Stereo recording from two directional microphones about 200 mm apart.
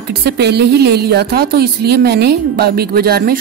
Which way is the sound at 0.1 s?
55° right (ahead or behind).